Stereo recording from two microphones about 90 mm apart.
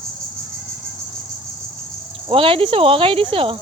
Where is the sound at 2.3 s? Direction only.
85° right.